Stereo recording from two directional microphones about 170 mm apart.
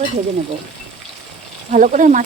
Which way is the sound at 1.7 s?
50° right (ahead or behind).